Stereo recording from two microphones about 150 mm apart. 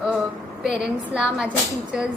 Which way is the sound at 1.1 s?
5° right (ahead or behind).